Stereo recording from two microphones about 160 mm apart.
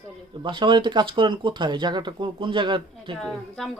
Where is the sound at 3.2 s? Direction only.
5° left (ahead or behind).